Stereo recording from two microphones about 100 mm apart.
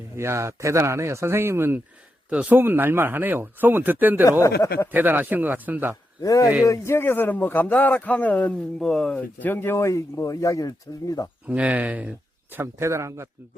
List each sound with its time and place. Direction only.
0.2 s speech: 30° right (ahead or behind)
4.3 s speech: 30° left (ahead or behind)
4.9 s speech: 20° right (ahead or behind)
6.2 s speech: 35° left (ahead or behind); by 8.5 s 15° left (ahead or behind)
8.8 s speech: 5° left (ahead or behind); by 11.3 s 35° left (ahead or behind)
11.4 s speech: 15° right (ahead or behind)